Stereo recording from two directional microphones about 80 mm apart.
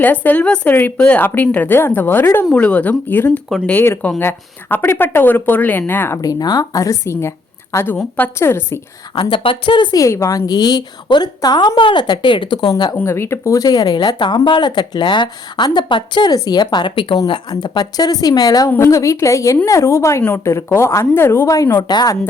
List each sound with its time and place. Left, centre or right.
0.0 s speech: left
2.6 s speech: centre
6.2 s a woman's voice: left
9.3 s a woman's voice: left
10.1 s a woman's voice: left
13.1 s speech: left
16.3 s a woman's voice: left
16.7 s a woman's voice: left
17.5 s speech: left
18.8 s a woman's voice: left
21.7 s speech: left